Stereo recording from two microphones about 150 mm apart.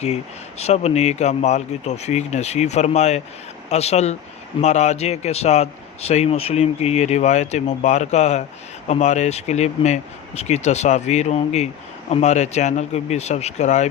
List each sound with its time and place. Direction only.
0.6 s speech: 45° left (ahead or behind)